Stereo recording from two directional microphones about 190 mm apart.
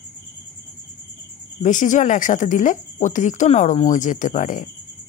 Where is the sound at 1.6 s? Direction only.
40° left (ahead or behind).